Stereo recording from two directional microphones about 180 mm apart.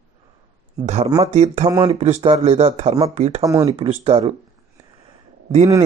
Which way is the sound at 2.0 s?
35° right (ahead or behind).